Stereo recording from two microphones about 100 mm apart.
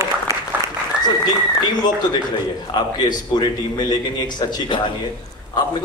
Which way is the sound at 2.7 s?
45° left (ahead or behind).